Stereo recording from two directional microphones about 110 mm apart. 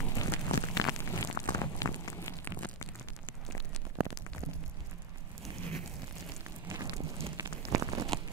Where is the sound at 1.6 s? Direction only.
30° left (ahead or behind).